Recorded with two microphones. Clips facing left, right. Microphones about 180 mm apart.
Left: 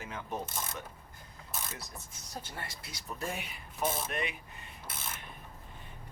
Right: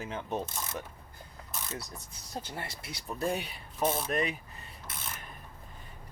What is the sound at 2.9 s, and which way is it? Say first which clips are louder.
Speech: right 7 dB; 35° right (ahead or behind).